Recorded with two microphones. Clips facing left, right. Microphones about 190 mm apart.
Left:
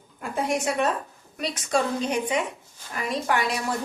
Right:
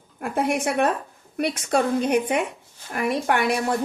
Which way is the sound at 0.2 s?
60° right (ahead or behind).